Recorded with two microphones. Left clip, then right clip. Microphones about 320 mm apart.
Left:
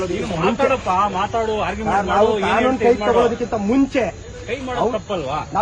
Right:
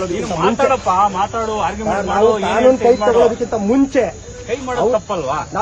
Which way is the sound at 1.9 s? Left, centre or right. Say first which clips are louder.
Right 1 dB; centre.